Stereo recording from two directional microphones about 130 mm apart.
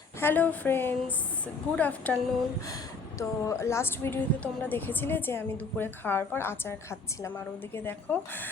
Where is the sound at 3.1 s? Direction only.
25° left (ahead or behind).